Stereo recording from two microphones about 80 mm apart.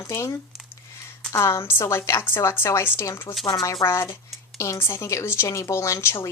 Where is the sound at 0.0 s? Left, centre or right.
Left.